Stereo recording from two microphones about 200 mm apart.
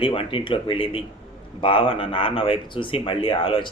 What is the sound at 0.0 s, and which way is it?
Speech, 25° left (ahead or behind).